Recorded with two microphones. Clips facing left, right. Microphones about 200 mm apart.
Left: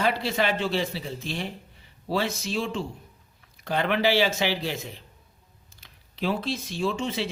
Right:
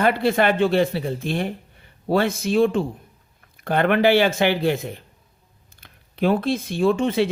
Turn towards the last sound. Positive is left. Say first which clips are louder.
# right 9 dB
turn(degrees=-55)  # may be behind; listen again after turning